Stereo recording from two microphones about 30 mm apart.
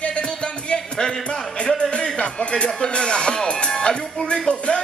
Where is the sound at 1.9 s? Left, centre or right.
Left.